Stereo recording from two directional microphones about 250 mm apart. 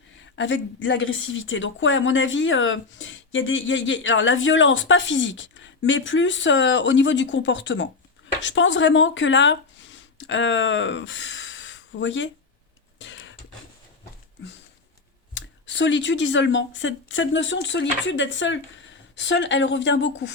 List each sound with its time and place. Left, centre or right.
0.2 s a woman's voice: left
13.0 s a sound: left
15.4 s a woman's voice: left